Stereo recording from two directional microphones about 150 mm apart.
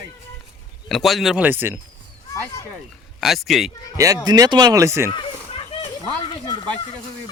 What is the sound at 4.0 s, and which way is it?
Speech, 25° right (ahead or behind).